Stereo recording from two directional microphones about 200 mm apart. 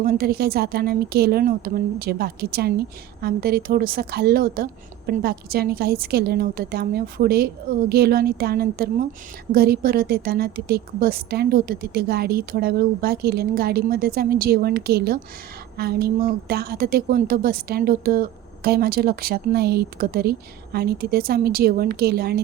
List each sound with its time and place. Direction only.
0.0 s a woman's voice: 50° right (ahead or behind)